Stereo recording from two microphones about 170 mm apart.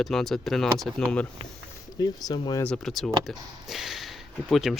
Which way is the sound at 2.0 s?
25° left (ahead or behind).